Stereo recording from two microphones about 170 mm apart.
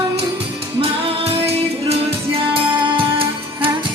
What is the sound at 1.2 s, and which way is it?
Music, 35° right (ahead or behind).